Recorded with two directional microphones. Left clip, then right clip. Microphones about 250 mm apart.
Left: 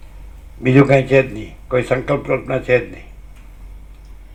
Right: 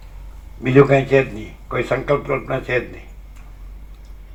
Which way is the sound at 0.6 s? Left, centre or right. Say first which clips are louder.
Left 1 dB; left.